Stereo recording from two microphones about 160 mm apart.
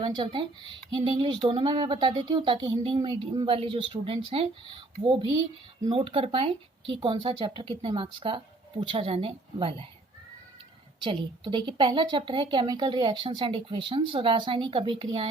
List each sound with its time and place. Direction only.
0.0 s a woman's voice: 30° right (ahead or behind)
11.0 s a woman's voice: 30° right (ahead or behind)